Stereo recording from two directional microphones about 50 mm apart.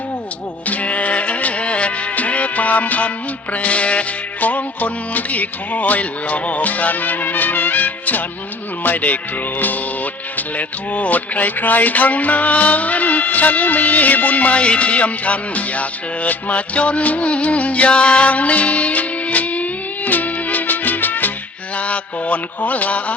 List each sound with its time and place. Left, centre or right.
0.7 s music: left
3.5 s speech: left
20.1 s music: left
21.8 s mantra: left